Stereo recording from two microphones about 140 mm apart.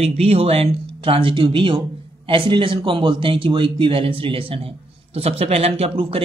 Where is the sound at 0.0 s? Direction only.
45° right (ahead or behind).